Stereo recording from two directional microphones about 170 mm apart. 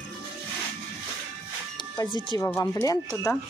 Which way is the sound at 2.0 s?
25° left (ahead or behind).